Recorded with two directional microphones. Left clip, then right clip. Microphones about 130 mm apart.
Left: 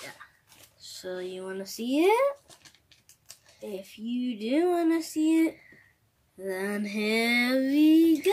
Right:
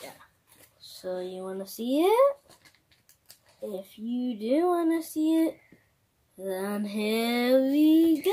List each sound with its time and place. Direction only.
0.7 s speech: 10° left (ahead or behind)
1.8 s female singing: 5° left (ahead or behind)
3.6 s female singing: 5° left (ahead or behind)